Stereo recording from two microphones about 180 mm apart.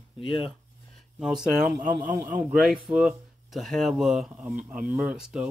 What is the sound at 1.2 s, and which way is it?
Speech, 5° right (ahead or behind).